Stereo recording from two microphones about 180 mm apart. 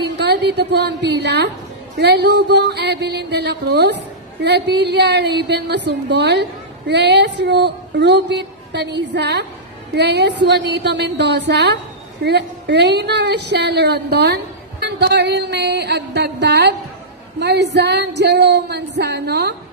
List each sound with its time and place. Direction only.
0.0 s a woman's voice: 70° right (ahead or behind)